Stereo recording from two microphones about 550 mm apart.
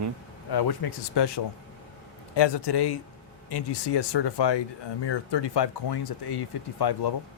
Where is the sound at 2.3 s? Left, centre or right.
Left.